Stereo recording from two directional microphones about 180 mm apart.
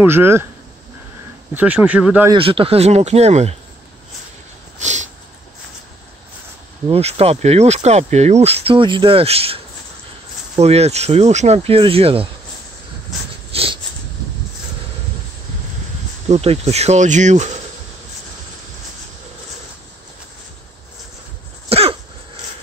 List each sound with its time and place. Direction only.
0.0 s speech: 10° right (ahead or behind)
1.5 s speech: 10° right (ahead or behind)
2.3 s speech: 30° right (ahead or behind)
4.7 s a sound: 40° right (ahead or behind)
6.9 s speech: 35° right (ahead or behind)
10.6 s speech: 35° right (ahead or behind)
13.5 s a sound: 30° right (ahead or behind)
16.3 s speech: 35° right (ahead or behind)
21.6 s throat clearing: 35° right (ahead or behind)